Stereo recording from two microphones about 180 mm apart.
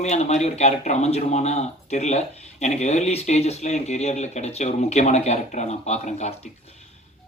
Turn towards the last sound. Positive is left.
turn(degrees=40)  # may be behind; listen again after turning